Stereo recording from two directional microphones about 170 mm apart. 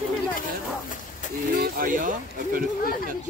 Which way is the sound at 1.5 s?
55° right (ahead or behind).